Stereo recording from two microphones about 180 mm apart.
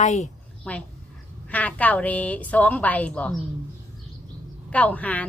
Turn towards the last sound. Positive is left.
turn(degrees=10)  # may be behind; listen again after turning